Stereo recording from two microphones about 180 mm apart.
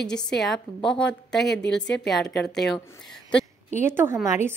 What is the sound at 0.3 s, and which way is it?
Speech, centre (ahead or behind).